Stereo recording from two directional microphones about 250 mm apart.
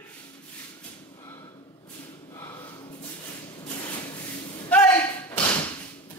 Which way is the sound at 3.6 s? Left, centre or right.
Left.